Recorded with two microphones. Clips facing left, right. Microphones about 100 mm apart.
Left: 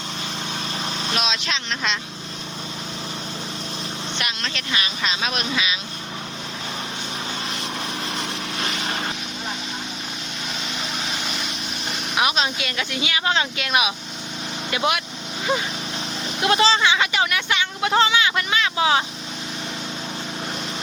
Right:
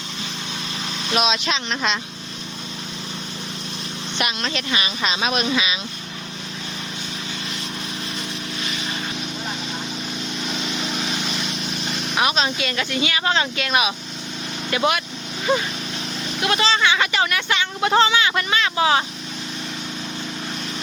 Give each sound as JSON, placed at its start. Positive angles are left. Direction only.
{"t": 1.2, "sound": "speech", "side_deg": -5}
{"t": 4.2, "sound": "speech", "side_deg": -10}
{"t": 8.5, "sound": "vehicle", "side_deg": 50}
{"t": 11.9, "sound": "speech", "side_deg": 10}
{"t": 16.4, "sound": "speech", "side_deg": 25}
{"t": 17.0, "sound": "vehicle", "side_deg": 10}